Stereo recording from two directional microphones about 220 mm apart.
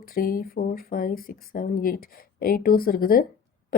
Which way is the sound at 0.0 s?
40° left (ahead or behind).